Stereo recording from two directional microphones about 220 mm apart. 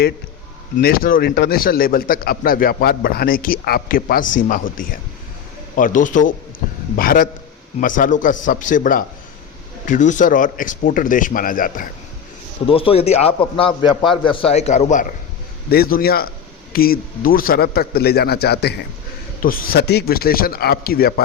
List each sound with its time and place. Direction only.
0.8 s a man's voice: 45° left (ahead or behind)
12.6 s a man's voice: 25° left (ahead or behind)
15.7 s speech: 45° left (ahead or behind)